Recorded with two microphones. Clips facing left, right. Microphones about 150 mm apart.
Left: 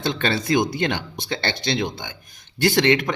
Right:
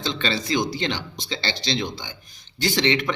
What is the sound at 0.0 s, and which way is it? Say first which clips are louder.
Speech: left 3 dB; 55° left (ahead or behind).